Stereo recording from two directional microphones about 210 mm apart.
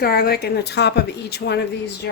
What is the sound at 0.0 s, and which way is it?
A woman's voice, 50° left (ahead or behind).